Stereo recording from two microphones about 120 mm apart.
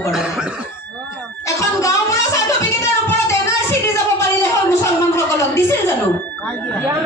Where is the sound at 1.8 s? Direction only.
25° left (ahead or behind).